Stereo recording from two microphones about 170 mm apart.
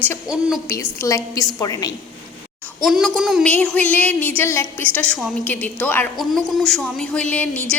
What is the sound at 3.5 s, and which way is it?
A woman's voice, 10° left (ahead or behind).